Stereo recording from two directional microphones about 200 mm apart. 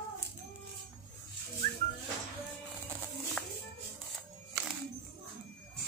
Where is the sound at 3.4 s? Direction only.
5° left (ahead or behind).